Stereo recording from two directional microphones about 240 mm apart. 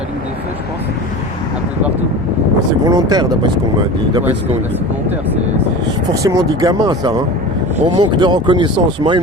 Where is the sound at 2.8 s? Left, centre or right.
Centre.